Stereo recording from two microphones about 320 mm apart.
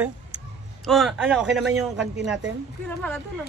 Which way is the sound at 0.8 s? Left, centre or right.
Centre.